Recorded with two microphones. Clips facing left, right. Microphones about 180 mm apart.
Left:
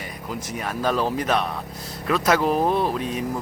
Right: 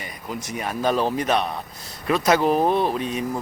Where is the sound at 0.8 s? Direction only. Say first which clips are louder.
Right 1 dB; 20° right (ahead or behind).